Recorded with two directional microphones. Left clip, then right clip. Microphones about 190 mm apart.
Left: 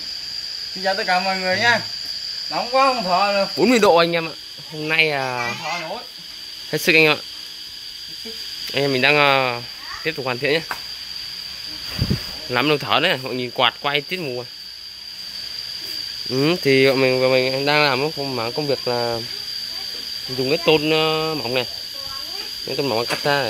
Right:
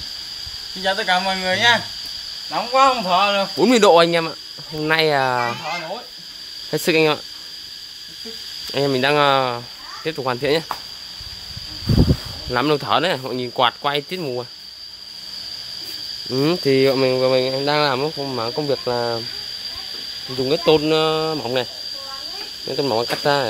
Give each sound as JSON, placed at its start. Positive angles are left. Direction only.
{"t": 0.8, "sound": "speech", "side_deg": -5}
{"t": 6.7, "sound": "speech", "side_deg": -5}
{"t": 8.7, "sound": "speech", "side_deg": -5}
{"t": 12.4, "sound": "speech", "side_deg": -5}
{"t": 16.3, "sound": "speech", "side_deg": 0}
{"t": 20.4, "sound": "speech", "side_deg": -5}
{"t": 22.7, "sound": "speech", "side_deg": -5}